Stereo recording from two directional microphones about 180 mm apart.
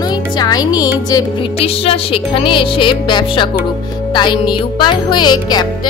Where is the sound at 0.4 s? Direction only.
20° left (ahead or behind).